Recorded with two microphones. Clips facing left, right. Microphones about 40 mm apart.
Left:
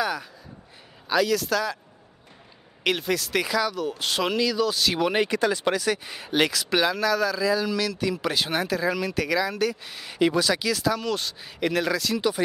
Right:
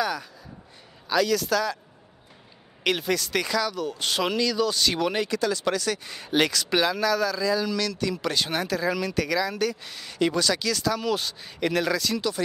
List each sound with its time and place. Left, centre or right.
0.0 s speech: centre
2.8 s speech: centre
5.1 s speech: left; by 12.2 s centre
12.2 s speech: centre